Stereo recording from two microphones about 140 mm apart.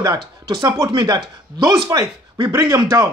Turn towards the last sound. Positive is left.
turn(degrees=-25)  # may be behind; listen again after turning